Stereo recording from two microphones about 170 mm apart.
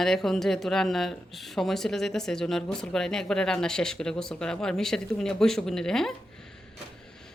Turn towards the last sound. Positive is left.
turn(degrees=0)  # may be behind; listen again after turning